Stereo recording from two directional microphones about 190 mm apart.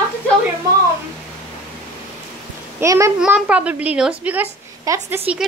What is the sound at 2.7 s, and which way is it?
A child's voice, 15° right (ahead or behind).